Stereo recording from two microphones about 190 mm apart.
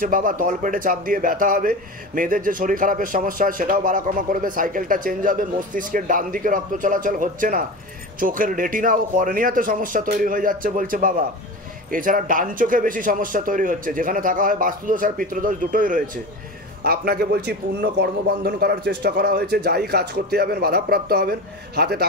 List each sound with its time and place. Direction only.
0.0 s a man's voice: 45° right (ahead or behind)